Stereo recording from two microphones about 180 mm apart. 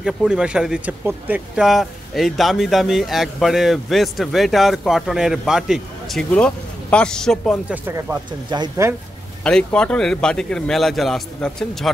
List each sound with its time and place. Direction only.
0.0 s speech: 5° right (ahead or behind)
7.7 s speech: 10° right (ahead or behind)
9.4 s speech: 5° left (ahead or behind)